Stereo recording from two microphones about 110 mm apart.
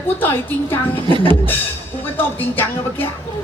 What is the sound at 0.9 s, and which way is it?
Speech, 55° left (ahead or behind).